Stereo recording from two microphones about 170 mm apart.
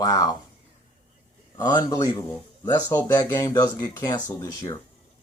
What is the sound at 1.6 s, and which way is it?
Speech, 25° left (ahead or behind).